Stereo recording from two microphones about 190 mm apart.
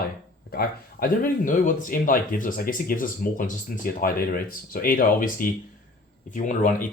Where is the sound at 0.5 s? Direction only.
50° left (ahead or behind).